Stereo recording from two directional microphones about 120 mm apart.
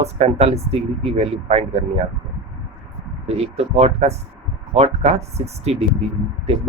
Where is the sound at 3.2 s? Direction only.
60° right (ahead or behind).